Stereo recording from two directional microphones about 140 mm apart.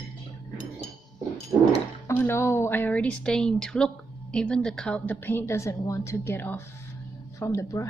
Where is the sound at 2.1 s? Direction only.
15° left (ahead or behind).